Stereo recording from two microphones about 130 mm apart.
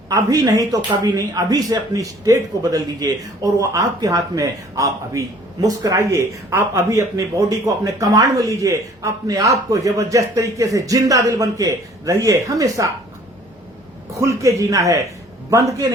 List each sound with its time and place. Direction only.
0.1 s speech: 30° right (ahead or behind)
14.1 s speech: 25° right (ahead or behind)